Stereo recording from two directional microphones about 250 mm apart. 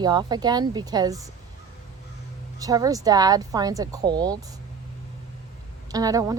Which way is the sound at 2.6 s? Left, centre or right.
Centre.